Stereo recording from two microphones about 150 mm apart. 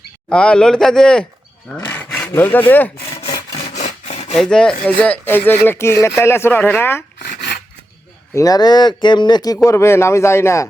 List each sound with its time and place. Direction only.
0.3 s speech: 5° left (ahead or behind)
3.6 s wood: 45° left (ahead or behind)
4.4 s speech: 5° left (ahead or behind)
7.2 s a sound: 90° left
8.4 s speech: 25° left (ahead or behind)